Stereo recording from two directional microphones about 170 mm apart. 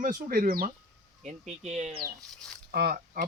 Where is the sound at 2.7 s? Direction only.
60° right (ahead or behind).